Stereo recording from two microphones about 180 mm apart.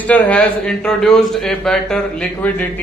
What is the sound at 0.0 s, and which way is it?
A man's voice, 10° left (ahead or behind).